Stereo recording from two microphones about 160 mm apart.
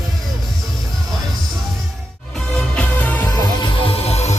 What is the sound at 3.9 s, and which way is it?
Music, 40° left (ahead or behind).